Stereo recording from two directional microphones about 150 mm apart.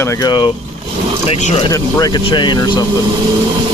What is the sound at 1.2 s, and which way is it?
Speech, 40° left (ahead or behind).